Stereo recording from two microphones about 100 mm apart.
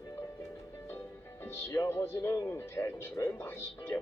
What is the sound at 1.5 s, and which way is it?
Speech, 25° left (ahead or behind).